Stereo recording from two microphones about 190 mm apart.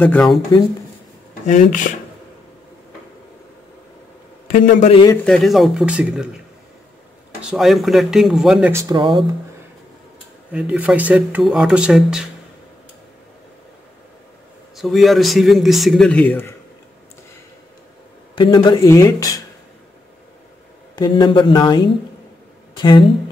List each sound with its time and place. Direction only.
0.0 s speech: 5° left (ahead or behind)
1.4 s speech: 40° left (ahead or behind)
4.5 s speech: 40° left (ahead or behind)
5.1 s speech: 5° left (ahead or behind)
7.4 s speech: centre (ahead or behind)
8.7 s speech: 20° right (ahead or behind)
10.5 s speech: 5° right (ahead or behind)
14.8 s speech: centre (ahead or behind)
18.3 s speech: 25° left (ahead or behind)
20.9 s speech: 25° left (ahead or behind)